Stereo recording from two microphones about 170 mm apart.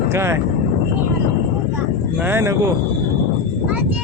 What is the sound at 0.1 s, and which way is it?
Speech, 15° right (ahead or behind).